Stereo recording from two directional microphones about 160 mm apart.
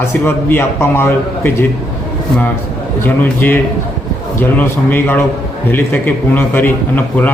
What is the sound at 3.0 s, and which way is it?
A man's voice, 15° left (ahead or behind).